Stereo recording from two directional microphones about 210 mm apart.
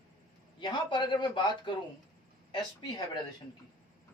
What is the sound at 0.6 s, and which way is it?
A man's voice, 20° left (ahead or behind).